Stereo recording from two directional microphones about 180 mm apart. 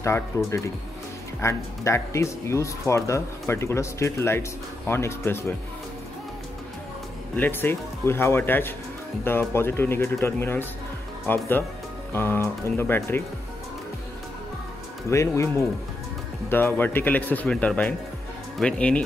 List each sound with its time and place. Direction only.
0.3 s speech: 15° left (ahead or behind)
7.3 s speech: 10° left (ahead or behind)
15.0 s speech: 15° left (ahead or behind)